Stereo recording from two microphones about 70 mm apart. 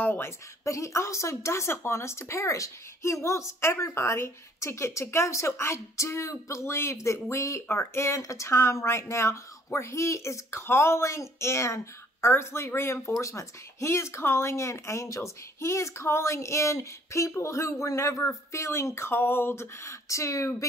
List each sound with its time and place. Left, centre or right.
0.0 s a woman's voice: left
0.7 s speech: left